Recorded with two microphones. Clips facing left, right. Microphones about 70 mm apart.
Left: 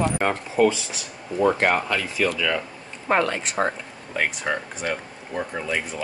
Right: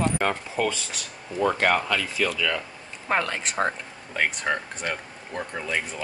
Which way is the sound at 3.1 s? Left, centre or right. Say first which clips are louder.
Left 4 dB; centre.